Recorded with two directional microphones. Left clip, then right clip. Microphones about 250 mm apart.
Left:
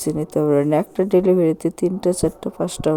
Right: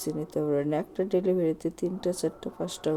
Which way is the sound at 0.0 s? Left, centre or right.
Left.